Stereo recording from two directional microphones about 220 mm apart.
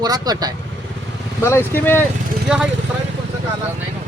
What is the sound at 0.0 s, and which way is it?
Speech, 15° right (ahead or behind).